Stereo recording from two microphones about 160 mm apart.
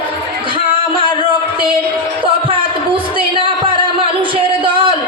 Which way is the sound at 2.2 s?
35° right (ahead or behind).